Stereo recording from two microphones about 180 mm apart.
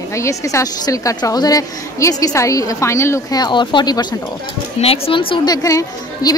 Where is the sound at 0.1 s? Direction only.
15° left (ahead or behind).